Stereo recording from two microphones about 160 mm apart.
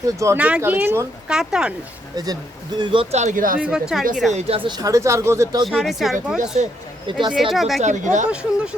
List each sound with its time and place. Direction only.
0.2 s speech: 20° right (ahead or behind)
2.1 s speech: 25° right (ahead or behind); by 3.6 s 60° right (ahead or behind)
3.6 s speech: 5° right (ahead or behind)
4.3 s speech: 40° right (ahead or behind); by 5.6 s 20° right (ahead or behind)
5.6 s speech: centre (ahead or behind)
7.8 s speech: 50° right (ahead or behind)
8.3 s speech: 5° right (ahead or behind)